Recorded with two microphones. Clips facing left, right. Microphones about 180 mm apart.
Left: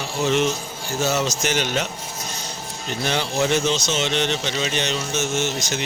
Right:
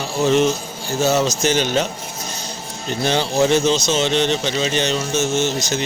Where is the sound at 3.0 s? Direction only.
30° right (ahead or behind).